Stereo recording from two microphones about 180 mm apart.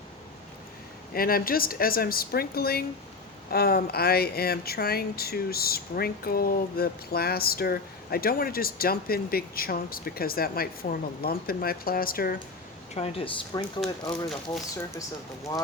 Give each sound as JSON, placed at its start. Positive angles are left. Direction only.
{"t": 1.1, "sound": "speech", "side_deg": 55}
{"t": 12.9, "sound": "speech", "side_deg": 35}